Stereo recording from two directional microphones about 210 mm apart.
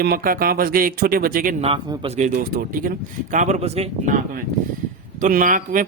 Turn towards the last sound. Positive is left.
turn(degrees=-40)  # may be behind; listen again after turning